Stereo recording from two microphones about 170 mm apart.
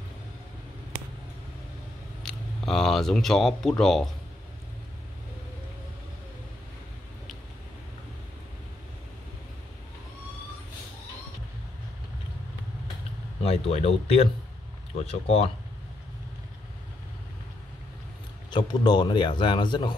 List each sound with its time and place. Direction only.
2.2 s speech: 5° left (ahead or behind)
13.4 s speech: 40° left (ahead or behind)
18.5 s speech: 25° left (ahead or behind)